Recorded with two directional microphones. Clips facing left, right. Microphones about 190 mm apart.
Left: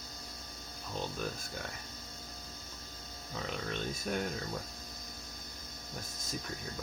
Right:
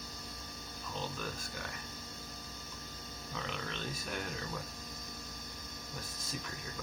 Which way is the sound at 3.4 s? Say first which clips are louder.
Left 5 dB; 45° left (ahead or behind).